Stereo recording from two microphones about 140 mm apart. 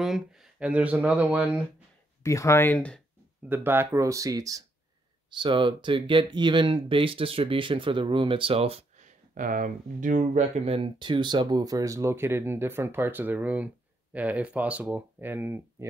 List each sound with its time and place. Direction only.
0.0 s speech: 5° right (ahead or behind)
2.2 s speech: 20° left (ahead or behind)
3.4 s speech: 15° right (ahead or behind)
5.3 s speech: 35° right (ahead or behind); by 15.9 s 15° right (ahead or behind)